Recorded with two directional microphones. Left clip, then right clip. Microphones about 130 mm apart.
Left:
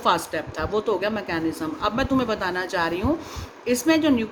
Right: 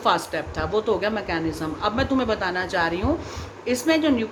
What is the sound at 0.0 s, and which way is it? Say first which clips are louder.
A woman's voice: even; 50° left (ahead or behind).